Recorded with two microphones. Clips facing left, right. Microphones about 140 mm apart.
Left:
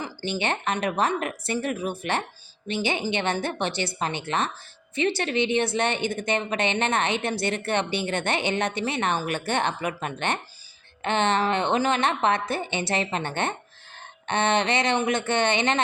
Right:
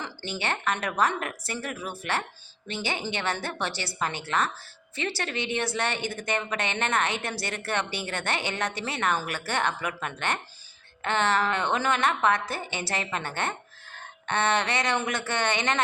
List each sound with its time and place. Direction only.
0.0 s a woman's voice: 15° left (ahead or behind)